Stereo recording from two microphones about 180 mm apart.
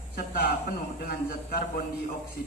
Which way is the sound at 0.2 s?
60° left (ahead or behind).